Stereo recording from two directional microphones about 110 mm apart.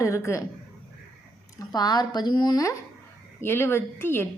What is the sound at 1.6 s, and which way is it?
Speech, 40° left (ahead or behind).